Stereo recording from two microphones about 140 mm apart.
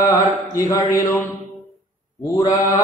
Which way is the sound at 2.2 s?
25° left (ahead or behind).